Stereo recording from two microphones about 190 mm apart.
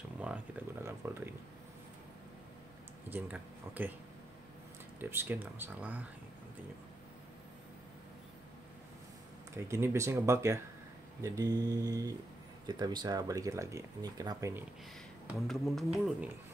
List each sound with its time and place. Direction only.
0.2 s speech: 5° right (ahead or behind)
3.1 s speech: 10° right (ahead or behind)
5.1 s speech: 10° right (ahead or behind)
9.7 s speech: 15° right (ahead or behind)
15.3 s speech: centre (ahead or behind)